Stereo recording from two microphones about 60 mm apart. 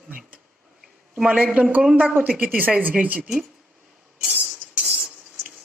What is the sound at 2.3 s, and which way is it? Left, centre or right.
Speech, right.